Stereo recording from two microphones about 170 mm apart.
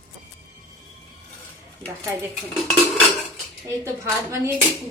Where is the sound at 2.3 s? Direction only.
Centre (ahead or behind).